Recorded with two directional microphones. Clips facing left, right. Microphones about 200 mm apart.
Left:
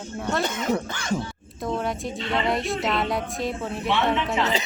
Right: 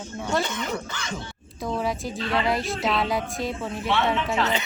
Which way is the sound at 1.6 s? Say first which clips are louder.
Even; centre (ahead or behind).